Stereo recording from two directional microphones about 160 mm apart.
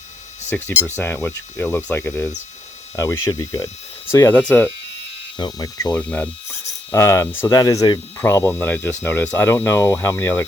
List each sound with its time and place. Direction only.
0.8 s speech: 15° left (ahead or behind)
5.4 s speech: 25° left (ahead or behind)
6.0 s speech: 10° left (ahead or behind)